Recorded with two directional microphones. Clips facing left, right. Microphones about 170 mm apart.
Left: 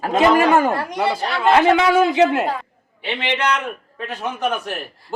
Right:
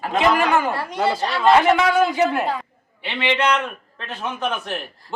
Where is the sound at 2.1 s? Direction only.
90° left.